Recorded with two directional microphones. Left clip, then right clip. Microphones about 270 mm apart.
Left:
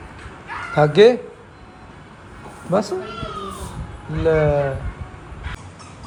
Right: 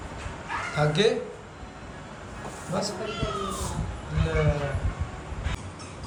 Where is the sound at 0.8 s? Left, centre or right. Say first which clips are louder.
Left 12 dB; left.